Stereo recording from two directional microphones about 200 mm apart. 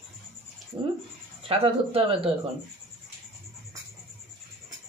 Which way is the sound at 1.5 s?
30° right (ahead or behind).